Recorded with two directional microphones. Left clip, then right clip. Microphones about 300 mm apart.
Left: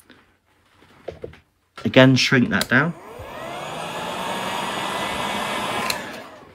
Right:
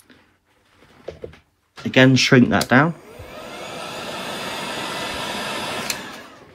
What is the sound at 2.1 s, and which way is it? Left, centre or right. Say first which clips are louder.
Speech: right 3 dB; centre.